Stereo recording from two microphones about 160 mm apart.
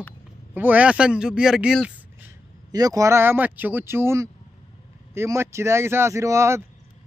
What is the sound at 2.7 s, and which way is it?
A man's voice, 25° right (ahead or behind).